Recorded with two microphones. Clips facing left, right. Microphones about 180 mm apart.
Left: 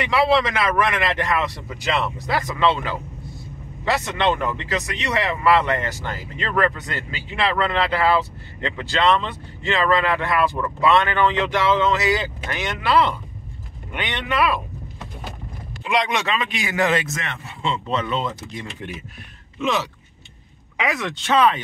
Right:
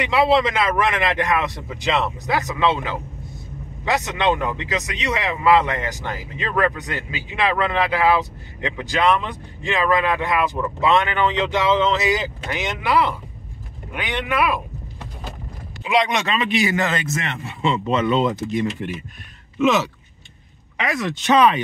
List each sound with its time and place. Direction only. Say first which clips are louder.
0.0 s a man's voice: right 1 dB; 20° right (ahead or behind)
15.8 s speech: right 2 dB; centre (ahead or behind)
17.2 s speech: right 4 dB; 10° right (ahead or behind)
20.8 s speech: right 1 dB; centre (ahead or behind)
21.3 s speech: right 2 dB; 15° right (ahead or behind)